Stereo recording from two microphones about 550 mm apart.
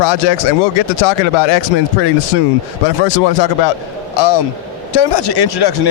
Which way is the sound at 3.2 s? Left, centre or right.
Left.